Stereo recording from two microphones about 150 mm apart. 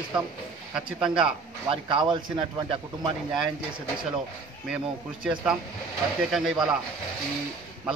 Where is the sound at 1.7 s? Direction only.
35° right (ahead or behind).